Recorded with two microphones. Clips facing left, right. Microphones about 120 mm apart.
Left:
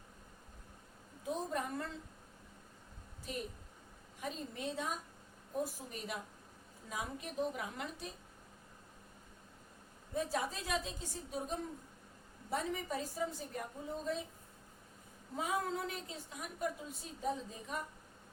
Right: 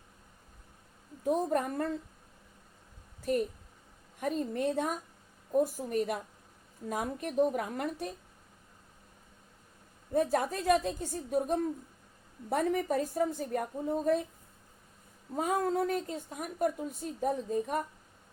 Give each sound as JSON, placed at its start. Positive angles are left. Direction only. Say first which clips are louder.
{"t": 1.2, "sound": "a woman's voice", "louder": "right 9 dB", "side_deg": -55}
{"t": 3.3, "sound": "a woman's voice", "louder": "right 13 dB", "side_deg": -55}
{"t": 10.2, "sound": "a woman's voice", "louder": "right 8 dB", "side_deg": -55}
{"t": 15.4, "sound": "a woman's voice", "louder": "right 8 dB", "side_deg": -45}